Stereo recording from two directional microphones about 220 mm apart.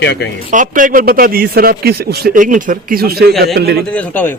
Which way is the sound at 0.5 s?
35° right (ahead or behind).